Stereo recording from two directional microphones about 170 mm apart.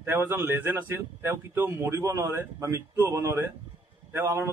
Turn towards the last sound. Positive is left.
turn(degrees=-15)  # may be behind; listen again after turning